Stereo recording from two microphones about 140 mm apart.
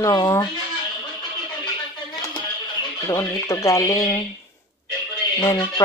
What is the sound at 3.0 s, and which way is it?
Speech, 20° left (ahead or behind).